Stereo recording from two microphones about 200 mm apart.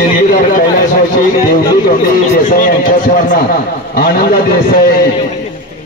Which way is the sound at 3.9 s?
50° left (ahead or behind).